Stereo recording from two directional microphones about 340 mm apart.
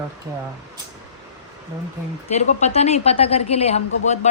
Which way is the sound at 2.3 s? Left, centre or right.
Centre.